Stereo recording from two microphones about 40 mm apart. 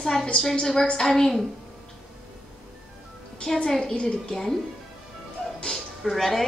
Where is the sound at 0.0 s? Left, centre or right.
Centre.